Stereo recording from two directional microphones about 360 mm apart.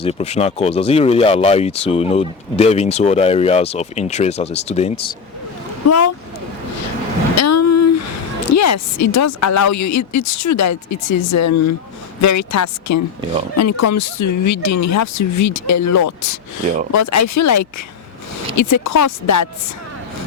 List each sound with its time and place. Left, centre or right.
0.0 s speech: centre
5.9 s speech: left
7.3 s a sound: left
8.5 s speech: left